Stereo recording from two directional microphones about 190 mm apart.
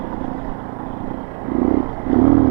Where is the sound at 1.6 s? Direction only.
25° right (ahead or behind).